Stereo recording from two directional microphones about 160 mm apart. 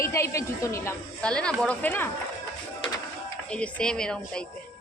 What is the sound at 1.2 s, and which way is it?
Speech, 5° left (ahead or behind).